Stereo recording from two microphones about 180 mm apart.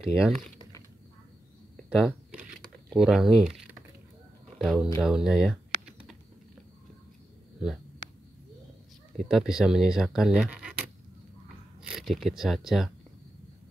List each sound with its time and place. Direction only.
0.1 s speech: centre (ahead or behind)
1.9 s speech: 5° right (ahead or behind)
4.6 s speech: centre (ahead or behind)
9.3 s speech: 5° right (ahead or behind)